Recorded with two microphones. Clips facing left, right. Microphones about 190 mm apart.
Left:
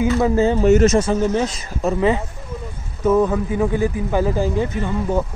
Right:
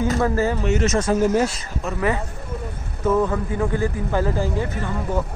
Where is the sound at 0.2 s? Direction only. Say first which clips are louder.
Left 4 dB; 20° left (ahead or behind).